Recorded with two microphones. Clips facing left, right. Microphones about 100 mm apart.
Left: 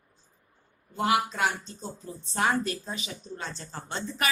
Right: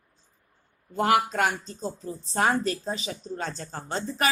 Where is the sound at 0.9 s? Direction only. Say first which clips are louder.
Right 3 dB; 45° right (ahead or behind).